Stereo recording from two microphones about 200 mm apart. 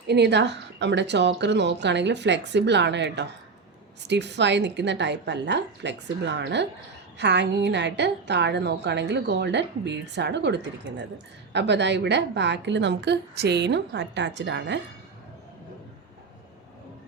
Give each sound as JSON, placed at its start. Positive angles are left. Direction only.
{"t": 0.1, "sound": "a woman's voice", "side_deg": -55}